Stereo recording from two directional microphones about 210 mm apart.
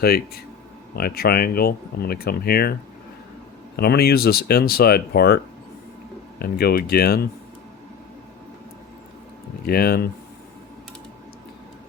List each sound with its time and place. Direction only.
0.0 s speech: 50° left (ahead or behind)
3.8 s speech: 50° left (ahead or behind)
6.4 s speech: 45° left (ahead or behind)
9.6 s speech: 45° left (ahead or behind)